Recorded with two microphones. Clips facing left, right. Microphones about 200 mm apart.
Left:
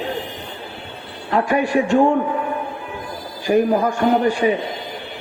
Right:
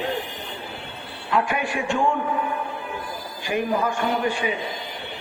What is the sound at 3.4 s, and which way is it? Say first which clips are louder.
A man's voice: left 7 dB; 40° left (ahead or behind).